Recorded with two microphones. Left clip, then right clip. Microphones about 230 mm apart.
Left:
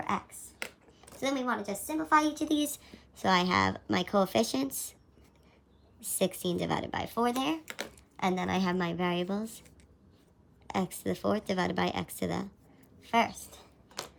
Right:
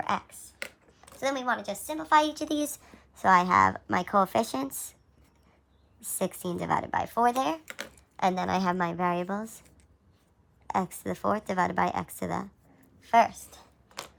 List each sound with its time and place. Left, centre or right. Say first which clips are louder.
0.6 s a sound: right 1 dB; centre
1.5 s a woman's voice: right 3 dB; centre
6.1 s speech: left 1 dB; centre
7.6 s speech: even; centre
8.1 s speech: right 4 dB; centre
10.8 s a woman's voice: right 2 dB; centre
14.0 s a sound: even; centre